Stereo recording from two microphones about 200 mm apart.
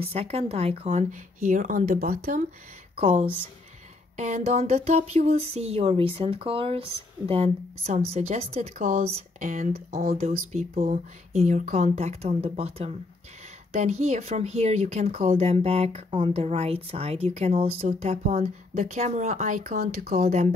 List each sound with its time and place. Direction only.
0.0 s speech: 30° right (ahead or behind); by 2.4 s 50° right (ahead or behind)
3.0 s a woman's voice: 30° right (ahead or behind); by 20.2 s 50° right (ahead or behind)
20.2 s speech: 35° right (ahead or behind)